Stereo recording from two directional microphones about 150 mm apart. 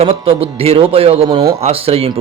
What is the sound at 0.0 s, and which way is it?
Speech, 40° right (ahead or behind).